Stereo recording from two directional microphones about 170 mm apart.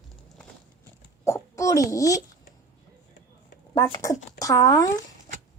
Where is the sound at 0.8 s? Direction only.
15° left (ahead or behind).